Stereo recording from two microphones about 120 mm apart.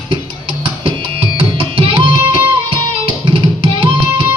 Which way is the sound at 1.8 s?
45° right (ahead or behind).